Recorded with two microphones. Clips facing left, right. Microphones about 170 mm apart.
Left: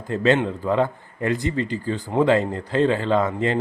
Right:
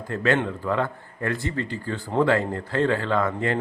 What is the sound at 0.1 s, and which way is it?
Speech, 20° left (ahead or behind).